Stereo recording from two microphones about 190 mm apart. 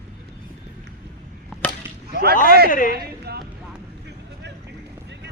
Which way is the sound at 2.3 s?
45° left (ahead or behind).